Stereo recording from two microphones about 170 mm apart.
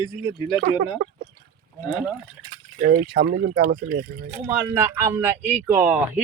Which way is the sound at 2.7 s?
55° right (ahead or behind).